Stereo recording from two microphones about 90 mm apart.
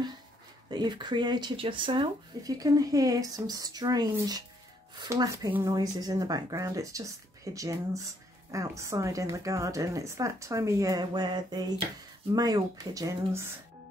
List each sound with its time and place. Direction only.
0.7 s speech: 55° right (ahead or behind)
1.6 s speech: 65° right (ahead or behind)
2.4 s speech: 40° right (ahead or behind)